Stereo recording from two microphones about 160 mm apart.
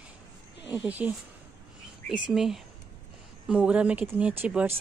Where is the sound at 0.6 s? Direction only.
10° right (ahead or behind).